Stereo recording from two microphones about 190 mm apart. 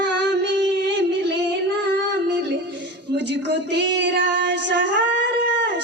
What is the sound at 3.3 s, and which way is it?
Female singing, 65° right (ahead or behind).